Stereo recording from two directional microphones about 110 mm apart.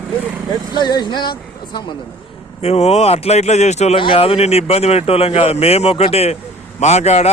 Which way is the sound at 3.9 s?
50° left (ahead or behind).